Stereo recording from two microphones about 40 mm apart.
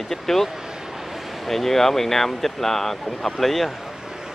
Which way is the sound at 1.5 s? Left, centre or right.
Centre.